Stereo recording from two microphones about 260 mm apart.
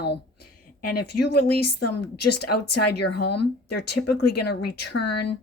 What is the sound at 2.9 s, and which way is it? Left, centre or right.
Speech, left.